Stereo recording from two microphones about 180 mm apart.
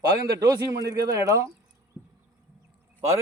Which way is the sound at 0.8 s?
20° right (ahead or behind).